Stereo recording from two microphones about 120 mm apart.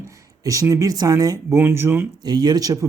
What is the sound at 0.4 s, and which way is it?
Speech, 25° right (ahead or behind).